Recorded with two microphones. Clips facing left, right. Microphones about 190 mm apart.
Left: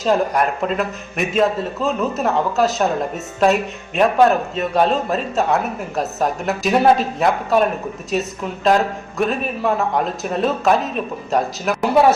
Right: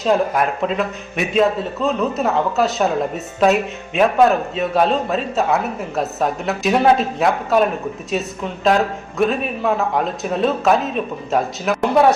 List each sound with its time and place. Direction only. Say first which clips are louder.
0.0 s speech: even; centre (ahead or behind)